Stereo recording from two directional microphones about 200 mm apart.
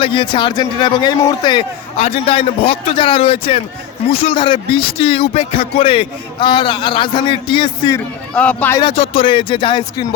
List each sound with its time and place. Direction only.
0.0 s a man's voice: 25° left (ahead or behind)
7.9 s a man's voice: 5° left (ahead or behind)
8.8 s a man's voice: 25° left (ahead or behind)